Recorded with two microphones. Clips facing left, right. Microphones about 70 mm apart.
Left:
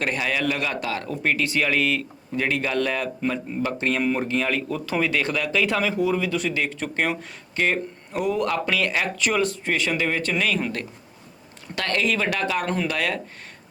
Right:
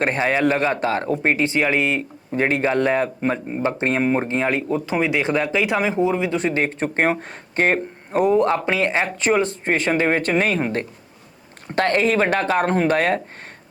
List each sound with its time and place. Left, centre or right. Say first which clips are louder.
0.0 s a man's voice: right 6 dB; right